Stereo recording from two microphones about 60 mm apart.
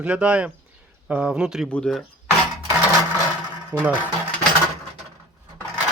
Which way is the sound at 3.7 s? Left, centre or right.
Right.